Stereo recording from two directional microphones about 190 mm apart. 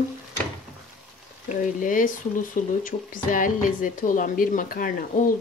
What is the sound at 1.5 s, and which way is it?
Speech, 45° left (ahead or behind).